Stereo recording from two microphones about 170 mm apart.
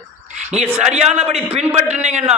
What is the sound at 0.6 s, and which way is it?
Speech, 10° right (ahead or behind).